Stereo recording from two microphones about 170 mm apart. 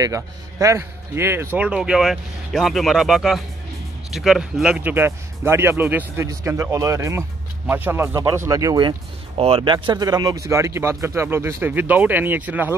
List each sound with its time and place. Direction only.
0.0 s a man's voice: 20° right (ahead or behind)